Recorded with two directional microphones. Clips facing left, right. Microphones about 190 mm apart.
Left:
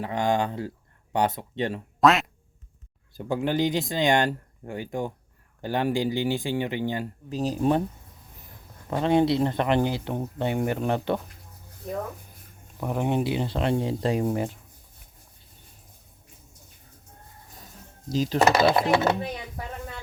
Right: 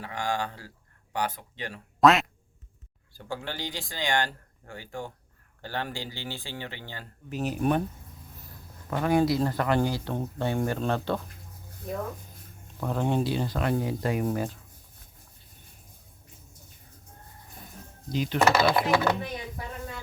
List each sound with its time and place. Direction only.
0.0 s speech: 20° left (ahead or behind)
2.0 s quack: centre (ahead or behind)
3.2 s speech: 20° left (ahead or behind)
7.3 s speech: 35° left (ahead or behind)
8.9 s speech: 25° left (ahead or behind)
12.8 s speech: 15° left (ahead or behind)
18.1 s speech: 40° left (ahead or behind)
18.3 s speech: 25° left (ahead or behind)